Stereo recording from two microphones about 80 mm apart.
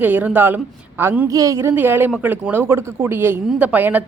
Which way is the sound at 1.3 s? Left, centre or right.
Right.